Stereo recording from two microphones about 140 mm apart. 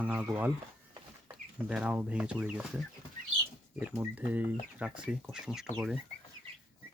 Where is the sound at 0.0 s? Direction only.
10° right (ahead or behind).